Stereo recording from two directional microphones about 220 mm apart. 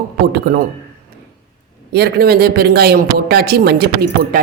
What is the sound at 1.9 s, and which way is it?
A woman's voice, 45° right (ahead or behind).